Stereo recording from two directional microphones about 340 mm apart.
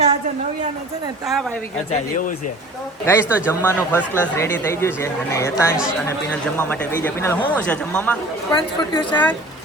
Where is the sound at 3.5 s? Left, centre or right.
Centre.